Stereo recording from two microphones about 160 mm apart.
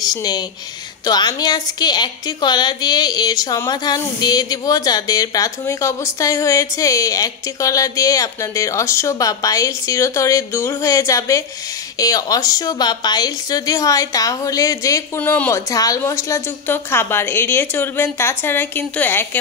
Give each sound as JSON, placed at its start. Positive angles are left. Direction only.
{"t": 0.0, "sound": "a woman's voice", "side_deg": 25}